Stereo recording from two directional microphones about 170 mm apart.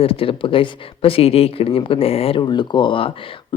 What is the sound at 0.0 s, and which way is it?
Speech, 35° left (ahead or behind).